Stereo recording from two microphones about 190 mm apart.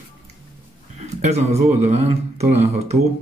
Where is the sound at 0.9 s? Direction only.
35° right (ahead or behind).